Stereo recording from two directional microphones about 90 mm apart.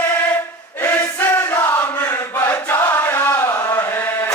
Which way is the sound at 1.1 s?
25° left (ahead or behind).